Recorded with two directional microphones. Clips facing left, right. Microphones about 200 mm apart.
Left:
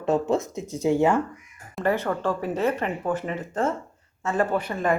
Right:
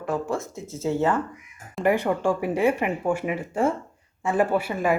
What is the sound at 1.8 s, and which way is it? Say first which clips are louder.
Speech: right 2 dB; 15° right (ahead or behind).